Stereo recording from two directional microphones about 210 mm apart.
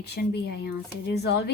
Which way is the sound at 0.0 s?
50° left (ahead or behind).